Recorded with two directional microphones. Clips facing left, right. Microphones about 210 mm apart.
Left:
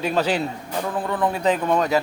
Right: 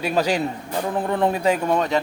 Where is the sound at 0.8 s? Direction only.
25° right (ahead or behind).